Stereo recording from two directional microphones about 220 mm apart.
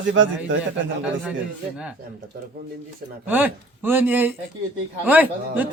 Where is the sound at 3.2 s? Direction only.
10° right (ahead or behind).